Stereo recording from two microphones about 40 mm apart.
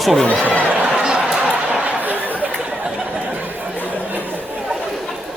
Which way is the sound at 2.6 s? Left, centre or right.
Right.